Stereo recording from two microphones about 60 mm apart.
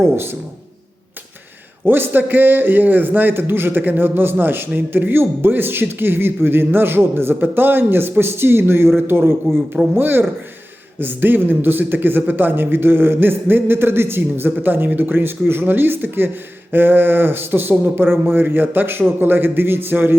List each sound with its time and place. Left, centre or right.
0.0 s a man's voice: right
1.8 s a man's voice: right